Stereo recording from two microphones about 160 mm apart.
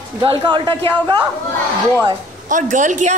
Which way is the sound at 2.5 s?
50° right (ahead or behind).